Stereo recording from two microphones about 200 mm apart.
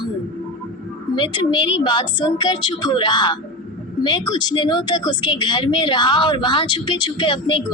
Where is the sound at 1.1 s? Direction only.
25° left (ahead or behind).